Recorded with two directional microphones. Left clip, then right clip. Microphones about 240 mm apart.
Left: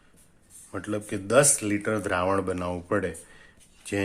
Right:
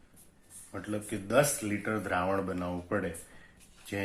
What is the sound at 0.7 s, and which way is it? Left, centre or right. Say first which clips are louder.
Speech: left 6 dB; left.